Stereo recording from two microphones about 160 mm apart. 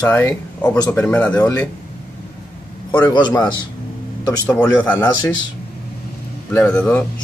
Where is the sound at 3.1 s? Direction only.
25° left (ahead or behind).